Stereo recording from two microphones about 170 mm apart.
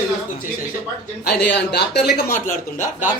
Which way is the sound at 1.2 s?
80° left.